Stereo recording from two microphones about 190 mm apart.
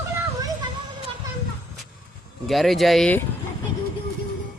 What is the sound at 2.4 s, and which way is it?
Speech, centre (ahead or behind).